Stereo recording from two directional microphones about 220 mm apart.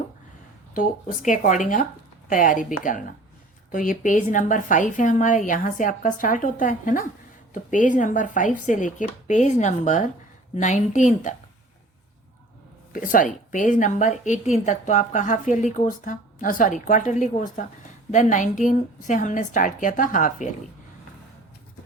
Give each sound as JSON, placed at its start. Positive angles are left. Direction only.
{"t": 0.7, "sound": "a woman's voice", "side_deg": 35}
{"t": 12.9, "sound": "a woman's voice", "side_deg": 40}